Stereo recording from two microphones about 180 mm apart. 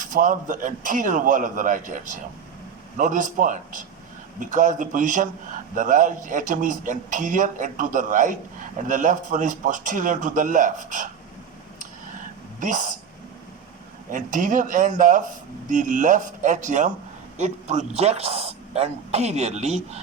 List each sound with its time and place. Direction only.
0.0 s a man's voice: 45° right (ahead or behind)
12.5 s speech: 45° right (ahead or behind)
14.1 s a man's voice: 45° right (ahead or behind)